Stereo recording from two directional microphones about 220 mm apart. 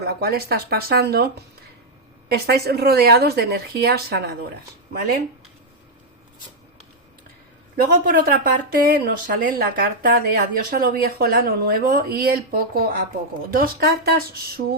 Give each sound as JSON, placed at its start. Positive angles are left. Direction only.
{"t": 0.0, "sound": "speech", "side_deg": -45}
{"t": 2.3, "sound": "speech", "side_deg": -45}
{"t": 7.8, "sound": "speech", "side_deg": -40}